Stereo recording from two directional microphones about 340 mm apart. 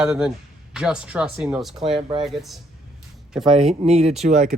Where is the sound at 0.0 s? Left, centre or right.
Centre.